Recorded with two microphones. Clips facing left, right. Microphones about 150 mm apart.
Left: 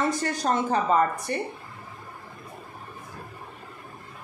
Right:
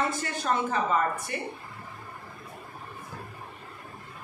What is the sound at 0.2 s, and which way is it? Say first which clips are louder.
A woman's voice: left 3 dB; 40° left (ahead or behind).